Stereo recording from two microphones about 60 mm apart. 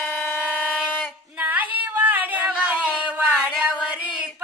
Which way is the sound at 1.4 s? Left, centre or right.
Right.